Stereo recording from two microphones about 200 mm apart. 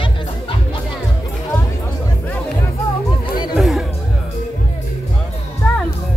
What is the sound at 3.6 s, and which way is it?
Music, centre (ahead or behind).